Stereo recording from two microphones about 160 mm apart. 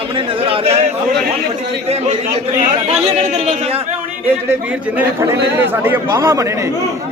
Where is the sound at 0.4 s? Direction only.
40° right (ahead or behind).